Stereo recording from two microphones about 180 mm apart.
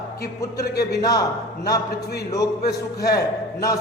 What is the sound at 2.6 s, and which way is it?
Speech, 60° left (ahead or behind).